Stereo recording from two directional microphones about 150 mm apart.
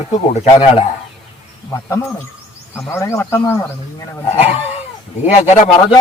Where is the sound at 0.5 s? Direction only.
35° left (ahead or behind).